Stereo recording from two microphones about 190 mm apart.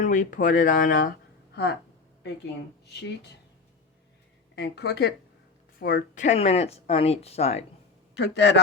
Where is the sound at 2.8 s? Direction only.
60° left (ahead or behind).